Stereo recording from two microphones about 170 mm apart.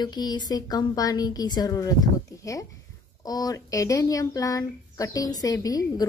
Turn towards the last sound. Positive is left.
turn(degrees=20)  # may be behind; listen again after turning